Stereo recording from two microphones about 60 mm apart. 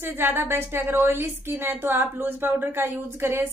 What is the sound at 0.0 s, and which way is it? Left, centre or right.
A woman's voice, right.